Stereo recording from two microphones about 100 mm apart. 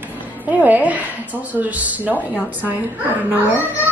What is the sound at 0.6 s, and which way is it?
Speech, 15° right (ahead or behind).